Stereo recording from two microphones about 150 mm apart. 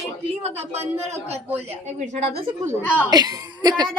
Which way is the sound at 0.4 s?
45° right (ahead or behind).